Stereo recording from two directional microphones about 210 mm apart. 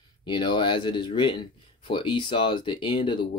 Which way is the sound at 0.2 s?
20° left (ahead or behind).